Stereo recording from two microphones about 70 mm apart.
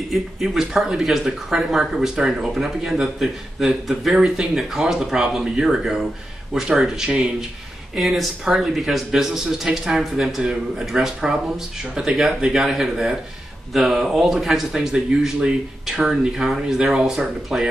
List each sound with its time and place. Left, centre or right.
0.1 s speech: centre